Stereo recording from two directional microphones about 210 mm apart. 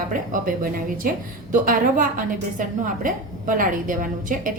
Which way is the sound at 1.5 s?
40° right (ahead or behind).